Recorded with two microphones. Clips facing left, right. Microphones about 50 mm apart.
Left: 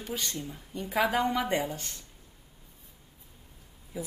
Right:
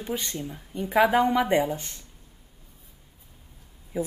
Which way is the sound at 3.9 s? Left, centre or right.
Right.